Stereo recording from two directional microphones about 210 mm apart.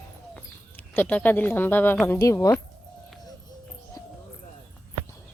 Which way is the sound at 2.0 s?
10° left (ahead or behind).